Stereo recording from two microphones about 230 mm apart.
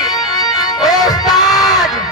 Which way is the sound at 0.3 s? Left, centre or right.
Centre.